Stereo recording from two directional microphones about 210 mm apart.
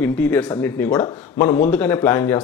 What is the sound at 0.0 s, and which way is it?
A man's voice, 5° left (ahead or behind).